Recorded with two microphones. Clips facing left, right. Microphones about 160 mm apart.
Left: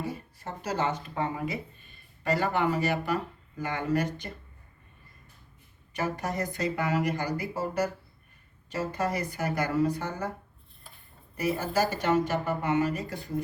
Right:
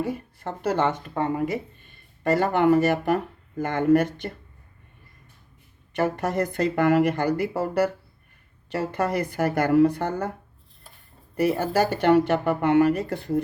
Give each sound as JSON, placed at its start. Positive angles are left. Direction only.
{"t": 0.0, "sound": "speech", "side_deg": -60}
{"t": 6.0, "sound": "speech", "side_deg": -60}
{"t": 11.3, "sound": "speech", "side_deg": -65}